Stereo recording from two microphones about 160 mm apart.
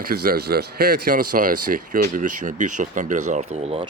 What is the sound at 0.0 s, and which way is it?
Speech, 70° right (ahead or behind).